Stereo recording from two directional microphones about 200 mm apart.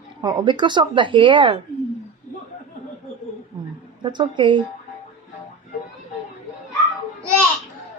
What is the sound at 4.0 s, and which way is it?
Speech, 25° right (ahead or behind).